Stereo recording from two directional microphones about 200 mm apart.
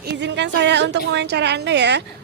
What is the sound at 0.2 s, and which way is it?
Speech, 60° right (ahead or behind).